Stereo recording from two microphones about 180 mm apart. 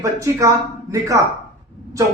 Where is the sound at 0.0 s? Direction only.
15° right (ahead or behind).